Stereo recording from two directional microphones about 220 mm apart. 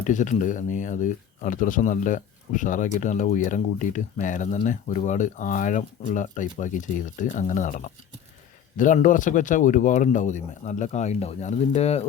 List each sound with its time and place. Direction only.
0.1 s speech: 35° left (ahead or behind)